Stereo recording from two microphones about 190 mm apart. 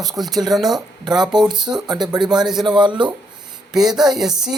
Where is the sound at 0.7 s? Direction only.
20° right (ahead or behind).